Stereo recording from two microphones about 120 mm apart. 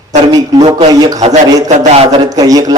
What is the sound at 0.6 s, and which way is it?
Speech, 60° right (ahead or behind).